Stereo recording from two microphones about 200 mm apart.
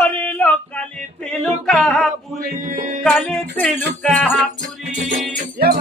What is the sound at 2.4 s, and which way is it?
Music, 45° right (ahead or behind).